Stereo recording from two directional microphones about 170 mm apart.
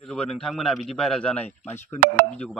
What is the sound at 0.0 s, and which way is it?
A man's voice, 5° left (ahead or behind).